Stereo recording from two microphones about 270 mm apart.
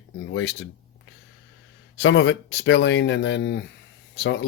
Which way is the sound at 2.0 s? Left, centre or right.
Left.